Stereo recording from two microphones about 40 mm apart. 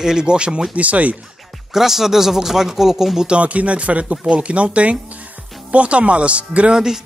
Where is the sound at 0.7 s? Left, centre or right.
Right.